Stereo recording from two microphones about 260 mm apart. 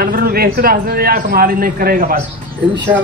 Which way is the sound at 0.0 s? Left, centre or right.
Right.